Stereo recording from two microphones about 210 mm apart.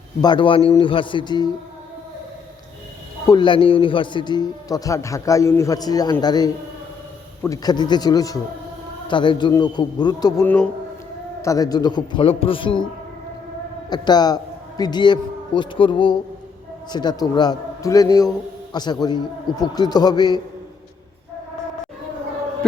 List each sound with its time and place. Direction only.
0.2 s a man's voice: 20° left (ahead or behind)
3.2 s a man's voice: 20° left (ahead or behind)
13.9 s a man's voice: 20° left (ahead or behind)